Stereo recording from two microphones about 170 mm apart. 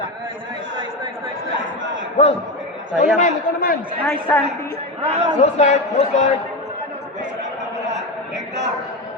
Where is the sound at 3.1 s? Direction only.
50° left (ahead or behind).